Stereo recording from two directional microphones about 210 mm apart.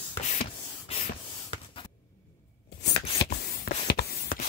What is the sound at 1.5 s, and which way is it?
Spray, 25° left (ahead or behind).